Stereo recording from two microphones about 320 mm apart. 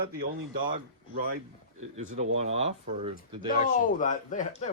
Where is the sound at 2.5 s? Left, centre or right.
Centre.